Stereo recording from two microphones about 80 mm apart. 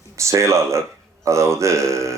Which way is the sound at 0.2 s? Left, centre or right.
Right.